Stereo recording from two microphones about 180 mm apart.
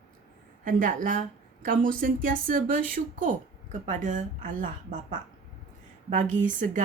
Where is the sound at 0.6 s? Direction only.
50° right (ahead or behind).